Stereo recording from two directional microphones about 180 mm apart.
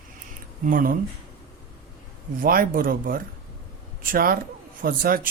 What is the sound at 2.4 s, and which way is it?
Speech, 50° right (ahead or behind).